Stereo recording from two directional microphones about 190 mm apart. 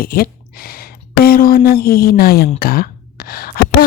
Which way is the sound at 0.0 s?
50° left (ahead or behind).